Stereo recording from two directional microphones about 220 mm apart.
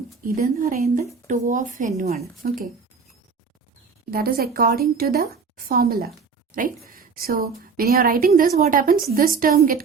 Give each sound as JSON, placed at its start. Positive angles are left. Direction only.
{"t": 0.3, "sound": "a woman's voice", "side_deg": -35}
{"t": 4.1, "sound": "a woman's voice", "side_deg": -45}